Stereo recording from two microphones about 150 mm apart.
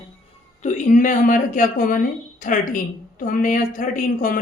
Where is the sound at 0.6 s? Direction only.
55° left (ahead or behind).